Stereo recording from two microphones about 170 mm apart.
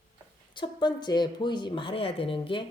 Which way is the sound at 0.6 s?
25° left (ahead or behind).